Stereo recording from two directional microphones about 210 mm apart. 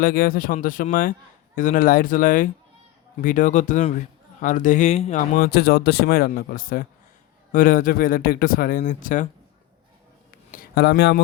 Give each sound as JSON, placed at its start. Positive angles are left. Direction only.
{"t": 0.0, "sound": "a man's voice", "side_deg": 45}
{"t": 10.5, "sound": "speech", "side_deg": 45}